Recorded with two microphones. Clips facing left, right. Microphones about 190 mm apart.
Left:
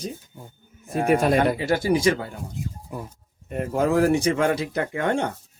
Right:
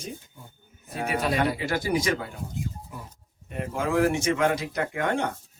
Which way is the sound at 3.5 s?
40° left (ahead or behind).